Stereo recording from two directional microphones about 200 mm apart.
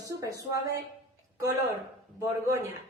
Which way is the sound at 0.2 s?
15° right (ahead or behind).